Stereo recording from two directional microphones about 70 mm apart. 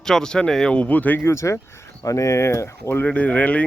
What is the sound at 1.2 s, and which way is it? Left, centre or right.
Speech, left.